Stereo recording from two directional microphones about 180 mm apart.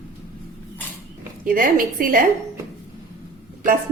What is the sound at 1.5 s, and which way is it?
Speech, 50° right (ahead or behind).